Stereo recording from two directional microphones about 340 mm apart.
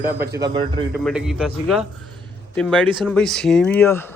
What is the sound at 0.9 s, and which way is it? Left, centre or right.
Speech, centre.